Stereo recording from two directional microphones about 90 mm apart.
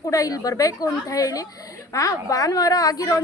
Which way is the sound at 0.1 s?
40° left (ahead or behind).